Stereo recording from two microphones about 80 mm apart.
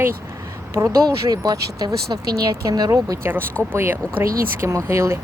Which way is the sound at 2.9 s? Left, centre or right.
Right.